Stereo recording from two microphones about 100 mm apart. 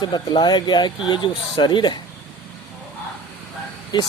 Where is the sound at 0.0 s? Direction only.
45° left (ahead or behind).